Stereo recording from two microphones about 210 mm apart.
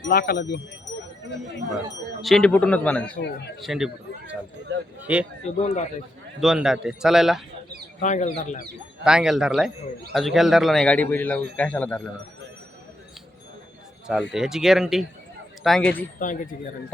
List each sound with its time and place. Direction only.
0.0 s speech: 45° left (ahead or behind)
2.2 s speech: 5° left (ahead or behind)
3.2 s speech: 55° left (ahead or behind)
3.6 s speech: centre (ahead or behind)
5.5 s speech: 35° left (ahead or behind)
6.4 s speech: centre (ahead or behind)
8.0 s speech: 35° left (ahead or behind)
9.0 s speech: 5° right (ahead or behind)
14.1 s speech: centre (ahead or behind)
16.1 s speech: 40° left (ahead or behind)